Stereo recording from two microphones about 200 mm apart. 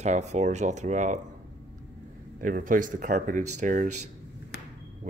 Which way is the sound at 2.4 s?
40° right (ahead or behind).